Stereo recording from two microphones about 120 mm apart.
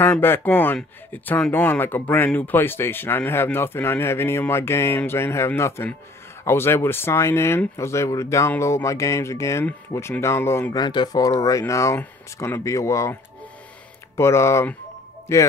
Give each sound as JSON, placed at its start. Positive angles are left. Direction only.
{"t": 0.0, "sound": "speech", "side_deg": 20}
{"t": 10.7, "sound": "speech", "side_deg": 40}